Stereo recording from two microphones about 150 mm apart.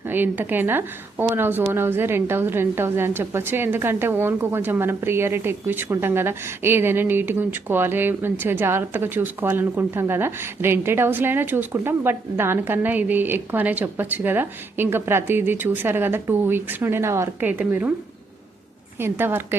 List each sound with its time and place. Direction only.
0.0 s a woman's voice: 15° right (ahead or behind)
18.9 s a woman's voice: 15° right (ahead or behind)